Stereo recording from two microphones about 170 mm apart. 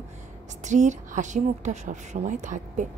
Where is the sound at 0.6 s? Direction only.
45° right (ahead or behind).